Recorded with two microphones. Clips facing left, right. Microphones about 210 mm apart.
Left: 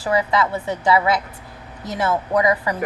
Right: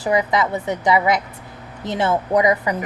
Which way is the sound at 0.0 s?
15° right (ahead or behind).